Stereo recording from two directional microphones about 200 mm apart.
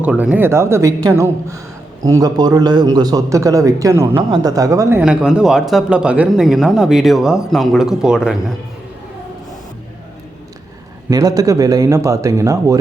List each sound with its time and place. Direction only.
0.0 s a man's voice: 5° right (ahead or behind)
11.1 s a man's voice: 20° right (ahead or behind)